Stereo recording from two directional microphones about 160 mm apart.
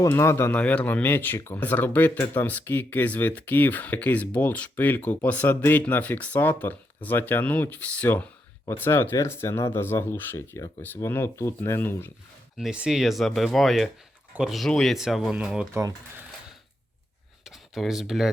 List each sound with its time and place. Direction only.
0.0 s speech: 15° left (ahead or behind)
12.5 s speech: 5° right (ahead or behind)
15.7 s speech: 20° right (ahead or behind)
17.4 s a sound: centre (ahead or behind)